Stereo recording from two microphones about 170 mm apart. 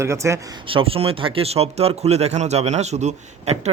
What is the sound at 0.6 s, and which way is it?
Speech, 30° right (ahead or behind).